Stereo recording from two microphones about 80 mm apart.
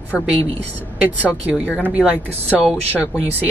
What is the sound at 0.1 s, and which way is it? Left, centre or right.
Speech, centre.